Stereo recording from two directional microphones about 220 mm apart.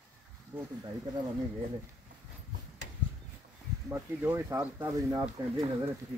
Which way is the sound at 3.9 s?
10° right (ahead or behind).